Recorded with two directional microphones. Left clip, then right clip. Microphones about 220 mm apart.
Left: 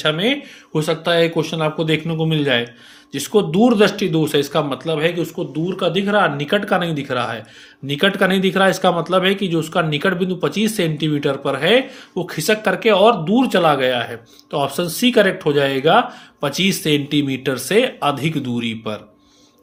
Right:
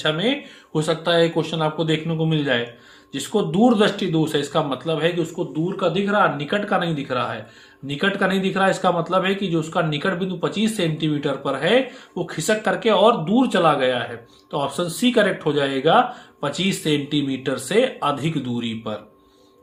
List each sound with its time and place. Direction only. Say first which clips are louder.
0.0 s speech: left 3 dB; 30° left (ahead or behind)